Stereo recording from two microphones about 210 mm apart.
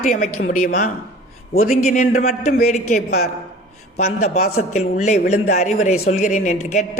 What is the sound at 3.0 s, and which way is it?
Speech, 50° left (ahead or behind).